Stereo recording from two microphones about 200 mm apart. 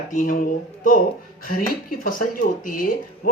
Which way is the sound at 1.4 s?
45° left (ahead or behind).